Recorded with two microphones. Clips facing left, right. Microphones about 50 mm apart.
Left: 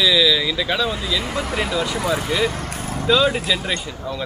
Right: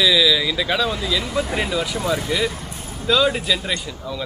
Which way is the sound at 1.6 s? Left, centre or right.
Centre.